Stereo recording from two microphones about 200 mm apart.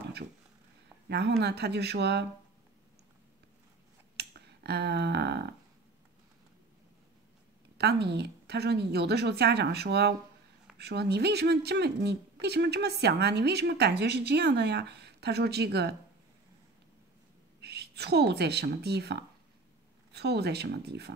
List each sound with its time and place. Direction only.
1.0 s speech: 55° right (ahead or behind)
4.2 s finger snapping: 55° right (ahead or behind)
7.7 s speech: 55° right (ahead or behind)
17.6 s a woman's voice: 55° right (ahead or behind)